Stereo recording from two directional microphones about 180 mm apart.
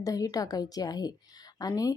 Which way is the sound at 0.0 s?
20° left (ahead or behind).